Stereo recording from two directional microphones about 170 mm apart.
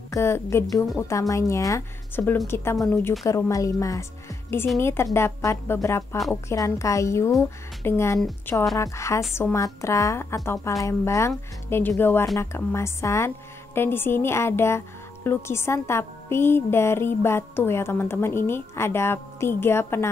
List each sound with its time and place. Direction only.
0.1 s a woman's voice: 15° left (ahead or behind)